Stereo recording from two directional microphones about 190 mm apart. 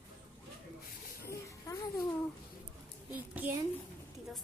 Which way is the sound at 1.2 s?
15° left (ahead or behind).